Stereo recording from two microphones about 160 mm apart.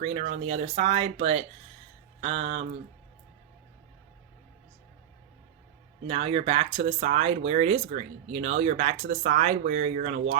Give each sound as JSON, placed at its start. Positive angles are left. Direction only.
{"t": 0.0, "sound": "speech", "side_deg": -40}
{"t": 6.1, "sound": "speech", "side_deg": -40}